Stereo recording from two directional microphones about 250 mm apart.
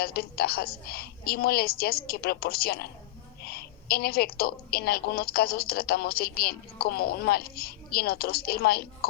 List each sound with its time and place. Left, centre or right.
0.0 s a woman's voice: left